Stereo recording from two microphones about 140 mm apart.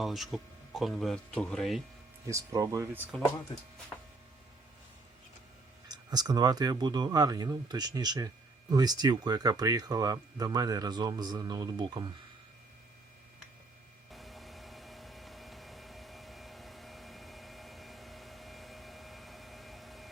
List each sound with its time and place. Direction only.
0.0 s speech: centre (ahead or behind)
2.3 s speech: 25° right (ahead or behind)
5.9 s speech: 30° right (ahead or behind)
14.1 s a sound: centre (ahead or behind)